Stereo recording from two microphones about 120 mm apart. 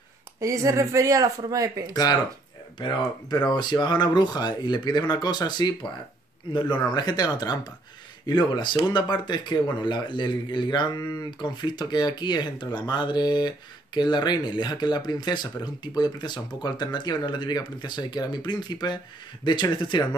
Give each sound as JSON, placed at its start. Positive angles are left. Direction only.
{"t": 0.4, "sound": "speech", "side_deg": -25}
{"t": 1.9, "sound": "speech", "side_deg": 35}